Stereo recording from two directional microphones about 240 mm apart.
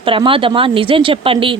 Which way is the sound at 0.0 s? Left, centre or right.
Right.